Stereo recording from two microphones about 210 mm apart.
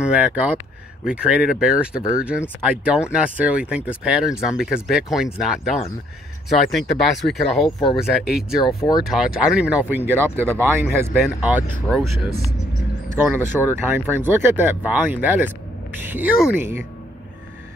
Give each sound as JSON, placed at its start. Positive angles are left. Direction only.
{"t": 0.0, "sound": "speech", "side_deg": -5}
{"t": 8.6, "sound": "speech", "side_deg": 20}
{"t": 9.0, "sound": "speech", "side_deg": 0}
{"t": 13.1, "sound": "speech", "side_deg": -10}